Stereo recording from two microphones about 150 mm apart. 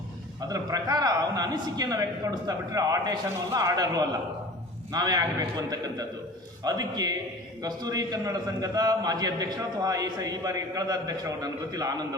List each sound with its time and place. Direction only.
0.4 s a man's voice: 25° right (ahead or behind)